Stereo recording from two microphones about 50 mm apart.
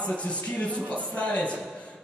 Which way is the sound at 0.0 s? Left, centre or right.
Left.